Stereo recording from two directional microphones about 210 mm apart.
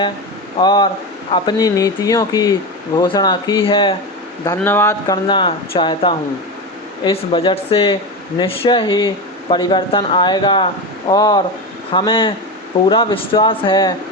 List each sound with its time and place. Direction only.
0.6 s speech: 20° left (ahead or behind)
4.5 s speech: 10° left (ahead or behind)